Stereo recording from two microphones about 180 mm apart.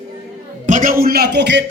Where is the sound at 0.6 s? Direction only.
45° right (ahead or behind); by 1.7 s 75° right (ahead or behind).